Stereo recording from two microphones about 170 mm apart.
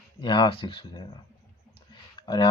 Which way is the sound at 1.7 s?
25° left (ahead or behind).